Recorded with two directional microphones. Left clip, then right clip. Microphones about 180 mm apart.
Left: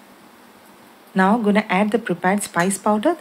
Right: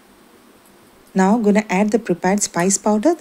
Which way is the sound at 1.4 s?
40° right (ahead or behind).